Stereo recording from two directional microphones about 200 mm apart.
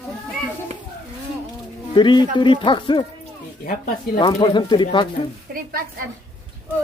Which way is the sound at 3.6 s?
45° left (ahead or behind).